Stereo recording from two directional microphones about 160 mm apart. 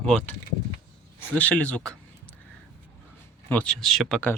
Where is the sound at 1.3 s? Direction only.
10° left (ahead or behind).